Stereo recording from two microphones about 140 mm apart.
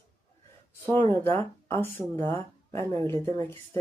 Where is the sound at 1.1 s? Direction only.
15° left (ahead or behind).